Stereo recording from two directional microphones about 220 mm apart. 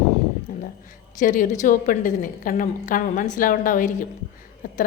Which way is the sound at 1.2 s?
35° left (ahead or behind).